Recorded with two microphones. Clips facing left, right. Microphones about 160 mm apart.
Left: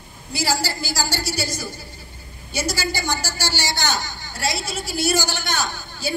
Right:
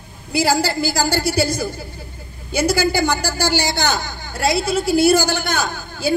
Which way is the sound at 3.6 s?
55° right (ahead or behind).